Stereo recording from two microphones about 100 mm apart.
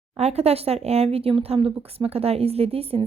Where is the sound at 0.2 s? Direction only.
90° right.